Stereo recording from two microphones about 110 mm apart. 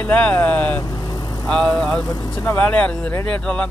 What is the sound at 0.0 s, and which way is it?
Speech, 15° left (ahead or behind).